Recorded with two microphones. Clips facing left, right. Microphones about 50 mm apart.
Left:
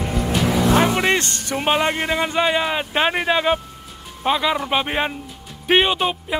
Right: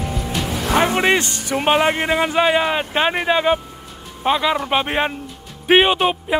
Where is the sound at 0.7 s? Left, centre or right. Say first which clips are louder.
Right 1 dB; centre.